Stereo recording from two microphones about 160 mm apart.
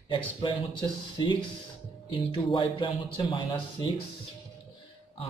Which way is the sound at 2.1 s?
35° left (ahead or behind).